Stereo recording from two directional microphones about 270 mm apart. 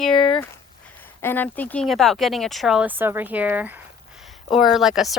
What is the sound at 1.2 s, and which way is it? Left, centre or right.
Speech, centre.